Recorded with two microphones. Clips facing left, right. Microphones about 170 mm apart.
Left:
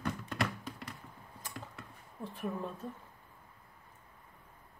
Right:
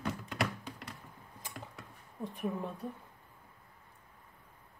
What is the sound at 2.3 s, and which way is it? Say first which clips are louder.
Speech: right 1 dB; 15° right (ahead or behind).